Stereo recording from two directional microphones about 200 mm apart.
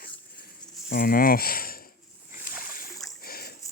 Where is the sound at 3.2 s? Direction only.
50° left (ahead or behind).